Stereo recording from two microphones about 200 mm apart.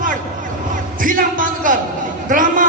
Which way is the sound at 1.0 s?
40° right (ahead or behind).